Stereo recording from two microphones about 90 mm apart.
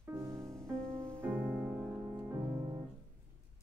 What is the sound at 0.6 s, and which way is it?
Music, 10° left (ahead or behind).